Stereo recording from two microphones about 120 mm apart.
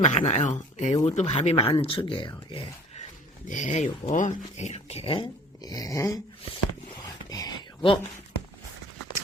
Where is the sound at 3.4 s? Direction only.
90° left; by 5.2 s 50° left (ahead or behind).